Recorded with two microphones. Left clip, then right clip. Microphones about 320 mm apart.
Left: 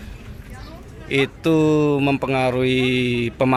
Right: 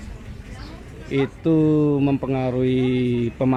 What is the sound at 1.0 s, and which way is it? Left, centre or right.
Speech, left.